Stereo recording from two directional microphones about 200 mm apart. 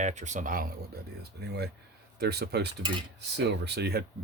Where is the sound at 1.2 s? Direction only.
55° right (ahead or behind).